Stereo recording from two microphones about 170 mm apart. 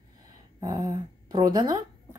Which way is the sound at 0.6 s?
20° right (ahead or behind).